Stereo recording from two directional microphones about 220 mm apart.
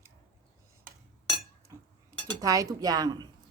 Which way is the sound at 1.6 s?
15° right (ahead or behind).